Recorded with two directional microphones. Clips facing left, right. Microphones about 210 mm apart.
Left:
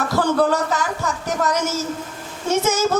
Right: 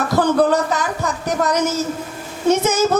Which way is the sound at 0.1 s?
20° right (ahead or behind).